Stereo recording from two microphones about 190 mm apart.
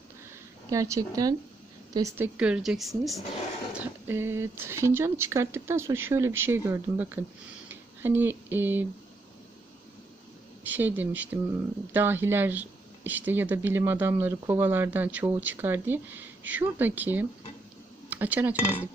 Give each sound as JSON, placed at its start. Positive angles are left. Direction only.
{"t": 0.7, "sound": "a woman's voice", "side_deg": -15}
{"t": 3.8, "sound": "speech", "side_deg": -10}
{"t": 10.6, "sound": "speech", "side_deg": -10}